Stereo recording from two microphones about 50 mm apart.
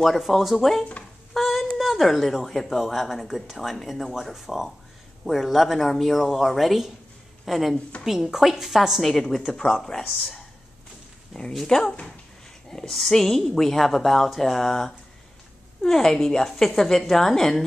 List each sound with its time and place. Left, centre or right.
0.0 s speech: centre
1.3 s a sound: centre
1.8 s a woman's voice: centre
11.5 s a woman's voice: centre